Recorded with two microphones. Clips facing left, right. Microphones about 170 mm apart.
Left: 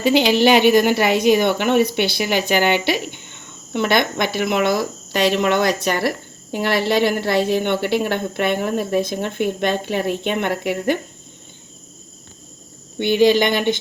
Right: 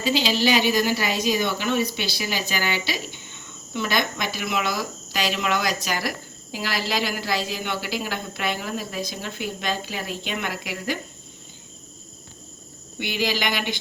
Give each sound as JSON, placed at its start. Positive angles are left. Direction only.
{"t": 0.0, "sound": "speech", "side_deg": 60}
{"t": 13.2, "sound": "speech", "side_deg": 20}